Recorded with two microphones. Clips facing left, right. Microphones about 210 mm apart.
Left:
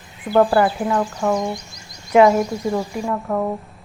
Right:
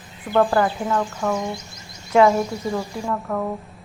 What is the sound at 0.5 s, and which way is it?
Speech, 15° left (ahead or behind).